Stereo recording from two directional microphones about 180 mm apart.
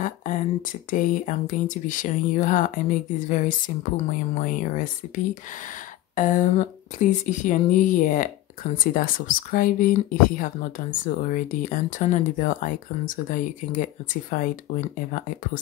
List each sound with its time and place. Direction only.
0.0 s speech: 45° left (ahead or behind)
6.1 s speech: 45° left (ahead or behind)